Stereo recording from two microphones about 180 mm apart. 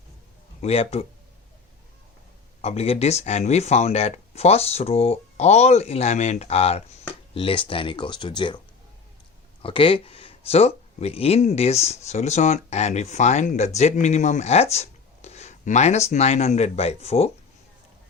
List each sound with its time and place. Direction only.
0.6 s speech: 35° left (ahead or behind)
2.6 s speech: 35° left (ahead or behind)
9.6 s speech: 30° left (ahead or behind)